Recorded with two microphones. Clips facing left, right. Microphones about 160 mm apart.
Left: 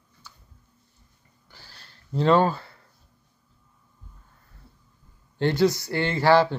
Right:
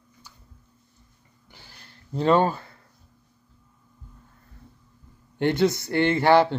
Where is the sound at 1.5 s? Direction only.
20° right (ahead or behind).